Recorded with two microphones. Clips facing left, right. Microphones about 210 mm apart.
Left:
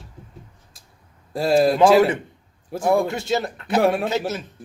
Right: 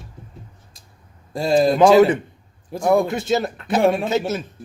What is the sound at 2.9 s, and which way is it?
Speech, 20° right (ahead or behind).